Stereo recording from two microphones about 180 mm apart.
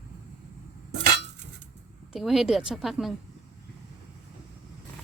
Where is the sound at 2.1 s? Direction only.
Centre (ahead or behind).